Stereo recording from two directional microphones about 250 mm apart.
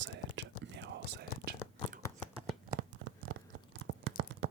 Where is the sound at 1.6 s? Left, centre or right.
Centre.